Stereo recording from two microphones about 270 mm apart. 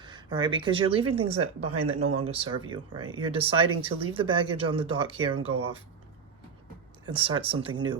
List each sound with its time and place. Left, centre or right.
0.0 s speech: centre
1.4 s speech: right
2.3 s speech: centre
7.0 s speech: centre